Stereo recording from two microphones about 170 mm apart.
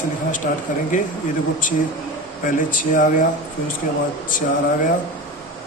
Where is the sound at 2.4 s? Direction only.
50° left (ahead or behind).